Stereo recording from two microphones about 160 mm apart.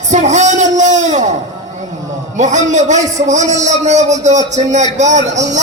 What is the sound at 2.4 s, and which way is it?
A man's voice, 50° right (ahead or behind).